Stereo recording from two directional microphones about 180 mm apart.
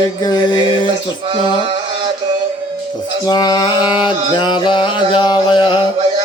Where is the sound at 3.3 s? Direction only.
20° left (ahead or behind).